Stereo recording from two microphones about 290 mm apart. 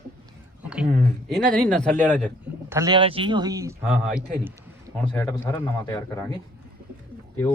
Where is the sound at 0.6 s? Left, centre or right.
Centre.